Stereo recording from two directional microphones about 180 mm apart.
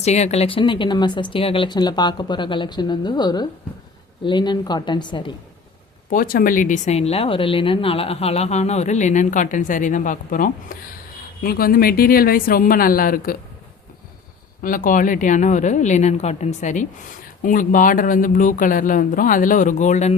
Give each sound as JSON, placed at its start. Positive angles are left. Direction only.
{"t": 0.0, "sound": "speech", "side_deg": 40}
{"t": 6.1, "sound": "speech", "side_deg": 50}
{"t": 14.6, "sound": "speech", "side_deg": 50}